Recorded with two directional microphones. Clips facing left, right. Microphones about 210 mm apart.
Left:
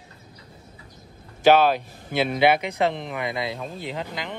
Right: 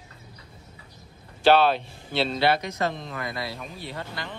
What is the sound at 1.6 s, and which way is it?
Speech, 10° left (ahead or behind).